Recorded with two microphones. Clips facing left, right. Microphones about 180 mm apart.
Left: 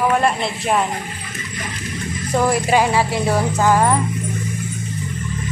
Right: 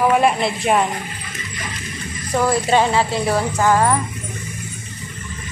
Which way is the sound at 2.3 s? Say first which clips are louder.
Even; 15° left (ahead or behind).